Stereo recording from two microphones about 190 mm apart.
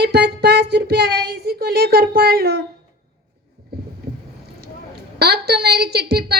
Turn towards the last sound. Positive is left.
turn(degrees=-55)  # may be behind; listen again after turning